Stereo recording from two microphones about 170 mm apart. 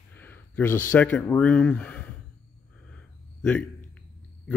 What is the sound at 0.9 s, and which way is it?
Speech, 10° left (ahead or behind).